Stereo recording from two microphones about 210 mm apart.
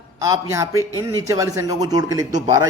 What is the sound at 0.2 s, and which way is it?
A man's voice, 15° right (ahead or behind).